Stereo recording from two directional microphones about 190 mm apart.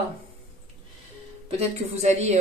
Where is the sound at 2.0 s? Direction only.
35° right (ahead or behind).